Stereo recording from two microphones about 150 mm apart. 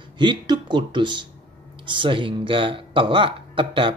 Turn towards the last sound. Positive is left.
turn(degrees=-35)  # may be behind; listen again after turning